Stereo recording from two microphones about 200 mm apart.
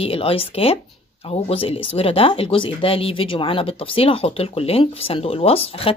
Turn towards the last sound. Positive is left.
turn(degrees=30)  # may be behind; listen again after turning